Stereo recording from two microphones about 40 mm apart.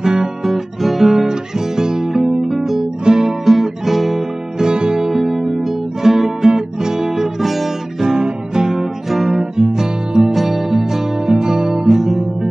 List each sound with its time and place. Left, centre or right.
0.0 s guitar: centre
1.8 s music: centre
3.1 s guitar: centre
4.6 s music: centre
6.5 s guitar: centre